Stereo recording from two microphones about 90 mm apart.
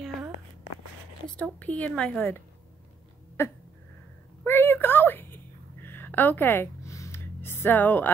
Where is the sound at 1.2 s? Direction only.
10° left (ahead or behind).